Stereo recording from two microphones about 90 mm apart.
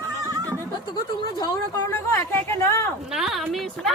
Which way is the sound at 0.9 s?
50° left (ahead or behind).